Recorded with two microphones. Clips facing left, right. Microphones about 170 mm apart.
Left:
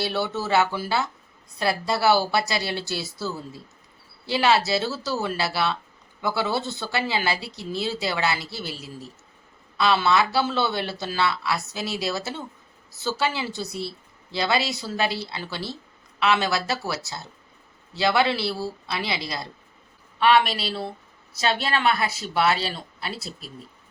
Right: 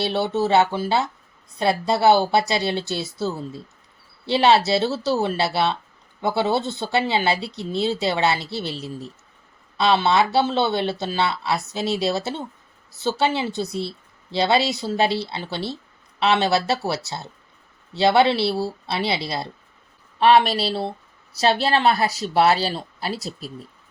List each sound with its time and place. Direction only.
0.0 s speech: 25° right (ahead or behind)
13.5 s speech: centre (ahead or behind)
14.3 s speech: 25° right (ahead or behind)